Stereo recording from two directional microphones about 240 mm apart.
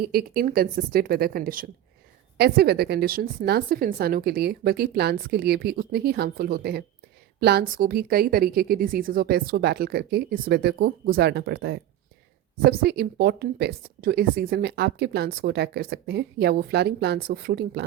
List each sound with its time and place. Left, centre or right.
0.0 s speech: right